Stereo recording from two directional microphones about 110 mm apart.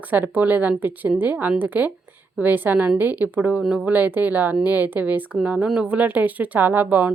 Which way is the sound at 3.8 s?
15° right (ahead or behind).